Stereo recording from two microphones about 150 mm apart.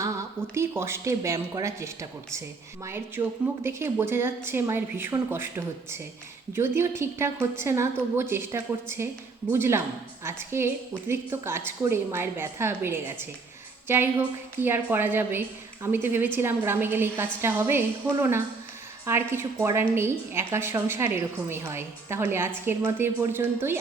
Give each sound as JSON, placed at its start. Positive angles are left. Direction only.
{"t": 0.0, "sound": "a woman's voice", "side_deg": -20}